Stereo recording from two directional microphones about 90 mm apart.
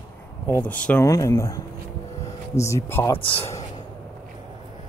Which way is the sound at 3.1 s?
85° left.